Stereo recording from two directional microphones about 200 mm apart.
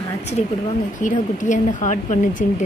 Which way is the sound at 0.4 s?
35° left (ahead or behind).